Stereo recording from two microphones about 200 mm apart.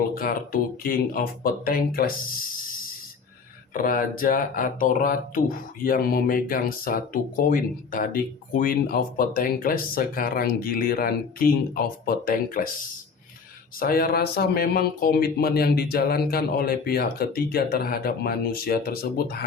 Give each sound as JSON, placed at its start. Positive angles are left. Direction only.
{"t": 0.1, "sound": "speech", "side_deg": 45}
{"t": 3.8, "sound": "speech", "side_deg": 45}
{"t": 13.7, "sound": "speech", "side_deg": 45}